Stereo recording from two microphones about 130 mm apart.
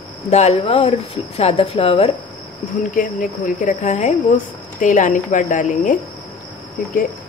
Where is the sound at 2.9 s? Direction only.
90° left.